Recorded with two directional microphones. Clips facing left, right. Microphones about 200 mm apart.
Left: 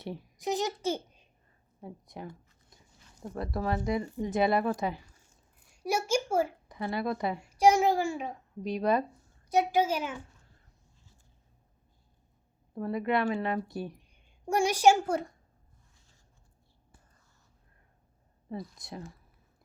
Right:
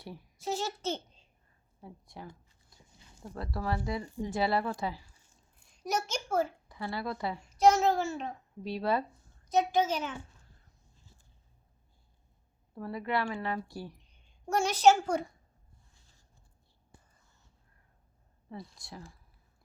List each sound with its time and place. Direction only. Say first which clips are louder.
0.0 s a child's voice: left 4 dB; 20° left (ahead or behind)
5.7 s a woman's voice: left 5 dB; 10° left (ahead or behind)
12.7 s a woman's voice: left 4 dB; 20° left (ahead or behind)
18.8 s speech: left 5 dB; 20° left (ahead or behind)